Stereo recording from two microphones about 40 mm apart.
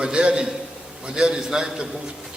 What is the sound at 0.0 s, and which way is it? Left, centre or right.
A man's voice, right.